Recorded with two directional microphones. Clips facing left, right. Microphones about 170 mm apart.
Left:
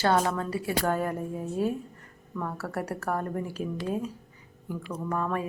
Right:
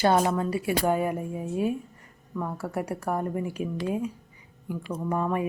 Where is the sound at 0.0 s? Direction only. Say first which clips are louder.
Right 3 dB; 15° right (ahead or behind).